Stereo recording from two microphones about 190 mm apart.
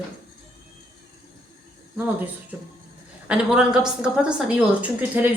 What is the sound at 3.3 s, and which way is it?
A woman's voice, 5° right (ahead or behind).